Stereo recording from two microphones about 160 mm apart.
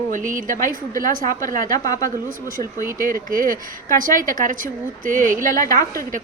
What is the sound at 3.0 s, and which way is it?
A woman's voice, 60° right (ahead or behind).